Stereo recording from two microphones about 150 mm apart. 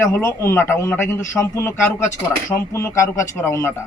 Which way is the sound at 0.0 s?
15° left (ahead or behind).